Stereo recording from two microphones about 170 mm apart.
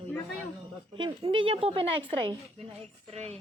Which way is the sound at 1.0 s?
30° right (ahead or behind).